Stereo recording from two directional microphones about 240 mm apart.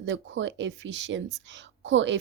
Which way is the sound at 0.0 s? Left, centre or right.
Right.